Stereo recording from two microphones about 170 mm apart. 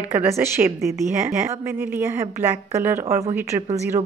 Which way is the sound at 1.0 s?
45° right (ahead or behind).